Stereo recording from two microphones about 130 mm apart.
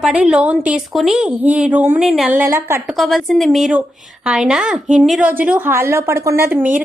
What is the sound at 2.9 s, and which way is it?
A woman's voice, centre (ahead or behind).